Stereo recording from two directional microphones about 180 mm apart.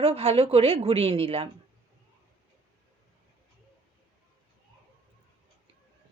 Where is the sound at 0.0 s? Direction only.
35° right (ahead or behind).